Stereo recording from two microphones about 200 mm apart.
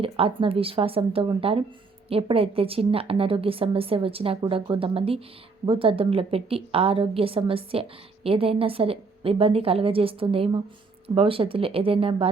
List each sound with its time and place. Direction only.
0.0 s a woman's voice: 25° right (ahead or behind)